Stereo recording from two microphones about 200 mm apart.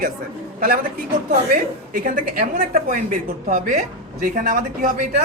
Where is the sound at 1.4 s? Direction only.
45° right (ahead or behind).